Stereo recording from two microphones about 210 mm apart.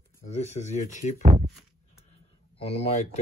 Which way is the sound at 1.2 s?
30° right (ahead or behind).